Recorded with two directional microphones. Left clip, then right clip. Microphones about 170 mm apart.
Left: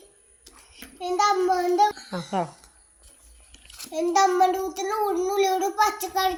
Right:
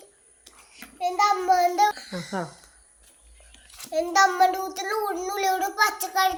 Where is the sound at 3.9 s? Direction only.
20° right (ahead or behind).